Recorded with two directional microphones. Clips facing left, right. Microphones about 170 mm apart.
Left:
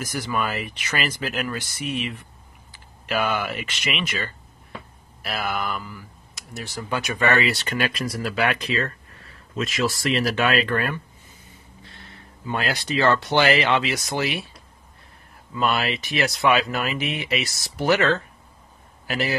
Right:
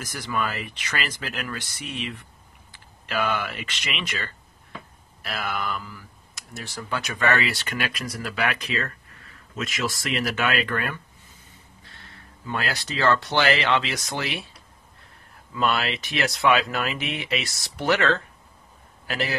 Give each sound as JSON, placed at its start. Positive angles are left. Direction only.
{"t": 0.0, "sound": "speech", "side_deg": 10}
{"t": 2.7, "sound": "speech", "side_deg": 10}
{"t": 5.2, "sound": "speech", "side_deg": 5}
{"t": 12.4, "sound": "speech", "side_deg": 20}
{"t": 15.5, "sound": "a man's voice", "side_deg": 5}